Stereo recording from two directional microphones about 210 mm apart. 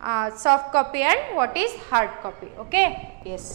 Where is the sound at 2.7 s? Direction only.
10° right (ahead or behind).